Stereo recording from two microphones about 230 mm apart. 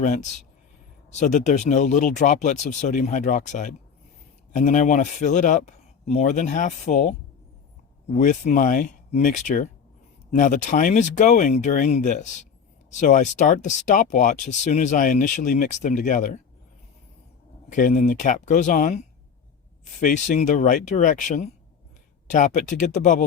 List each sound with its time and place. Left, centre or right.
0.0 s speech: left
17.7 s speech: left